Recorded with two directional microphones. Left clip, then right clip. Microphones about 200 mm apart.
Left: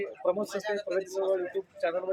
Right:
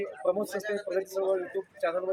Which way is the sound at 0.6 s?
35° left (ahead or behind).